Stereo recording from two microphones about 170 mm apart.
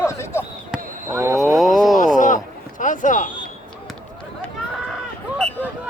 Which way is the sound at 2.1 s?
50° left (ahead or behind).